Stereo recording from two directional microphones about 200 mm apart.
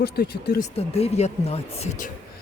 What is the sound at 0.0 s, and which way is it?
Speech, 50° left (ahead or behind).